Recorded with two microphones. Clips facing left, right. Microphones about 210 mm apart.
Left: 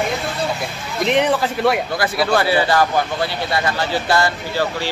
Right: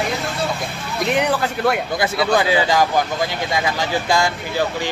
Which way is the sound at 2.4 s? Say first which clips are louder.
Left 1 dB; 15° right (ahead or behind).